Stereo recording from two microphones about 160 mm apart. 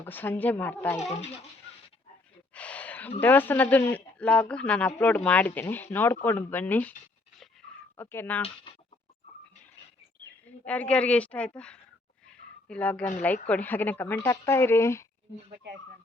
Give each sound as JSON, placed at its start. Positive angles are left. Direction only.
{"t": 0.0, "sound": "a woman's voice", "side_deg": 10}
{"t": 2.6, "sound": "a sound", "side_deg": 10}
{"t": 3.2, "sound": "a woman's voice", "side_deg": 10}
{"t": 7.9, "sound": "a woman's voice", "side_deg": 15}
{"t": 8.4, "sound": "speech", "side_deg": 40}
{"t": 10.7, "sound": "a woman's voice", "side_deg": 10}